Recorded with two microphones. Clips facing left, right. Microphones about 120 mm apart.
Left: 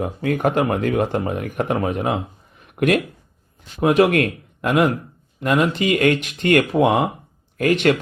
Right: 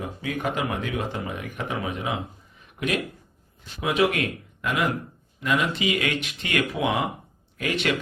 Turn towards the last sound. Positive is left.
turn(degrees=50)  # may be behind; listen again after turning